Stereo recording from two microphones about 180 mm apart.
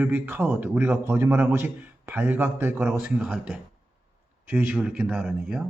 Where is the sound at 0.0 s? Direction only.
10° right (ahead or behind).